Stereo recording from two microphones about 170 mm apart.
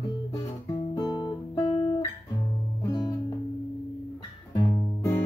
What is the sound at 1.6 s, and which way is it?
Music, 30° left (ahead or behind).